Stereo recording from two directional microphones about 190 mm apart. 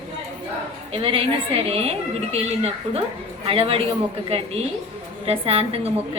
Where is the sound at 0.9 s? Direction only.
30° right (ahead or behind).